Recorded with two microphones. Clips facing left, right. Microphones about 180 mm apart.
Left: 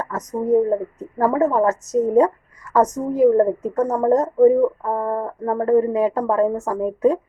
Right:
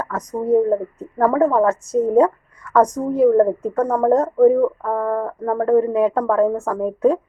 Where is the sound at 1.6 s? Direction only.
40° left (ahead or behind).